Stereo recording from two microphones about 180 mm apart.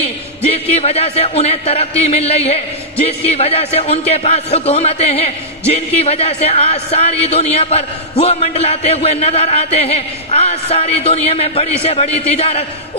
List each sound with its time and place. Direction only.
0.5 s a man's voice: 35° left (ahead or behind)